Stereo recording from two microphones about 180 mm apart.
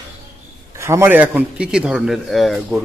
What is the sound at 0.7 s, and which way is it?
A man's voice, 15° right (ahead or behind).